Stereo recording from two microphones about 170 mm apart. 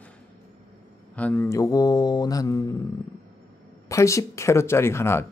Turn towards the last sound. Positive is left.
turn(degrees=15)  # may be behind; listen again after turning